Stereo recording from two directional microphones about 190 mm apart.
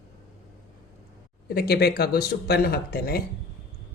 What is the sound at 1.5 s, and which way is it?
A woman's voice, 55° left (ahead or behind).